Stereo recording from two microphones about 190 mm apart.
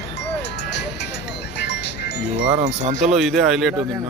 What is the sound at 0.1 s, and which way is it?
Music, 65° left (ahead or behind).